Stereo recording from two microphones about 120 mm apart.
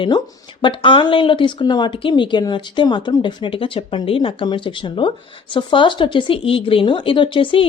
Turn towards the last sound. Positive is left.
turn(degrees=45)  # may be behind; listen again after turning